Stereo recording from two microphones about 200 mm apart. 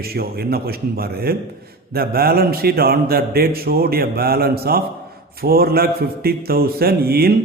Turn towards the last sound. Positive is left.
turn(degrees=-50)  # may be behind; listen again after turning